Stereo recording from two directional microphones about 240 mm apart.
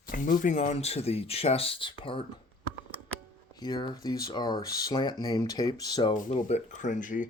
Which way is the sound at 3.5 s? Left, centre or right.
Centre.